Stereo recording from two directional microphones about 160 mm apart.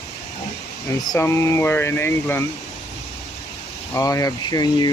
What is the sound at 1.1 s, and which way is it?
Speech, 15° left (ahead or behind).